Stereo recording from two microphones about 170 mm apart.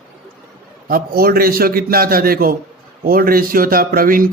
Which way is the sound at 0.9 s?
60° right (ahead or behind).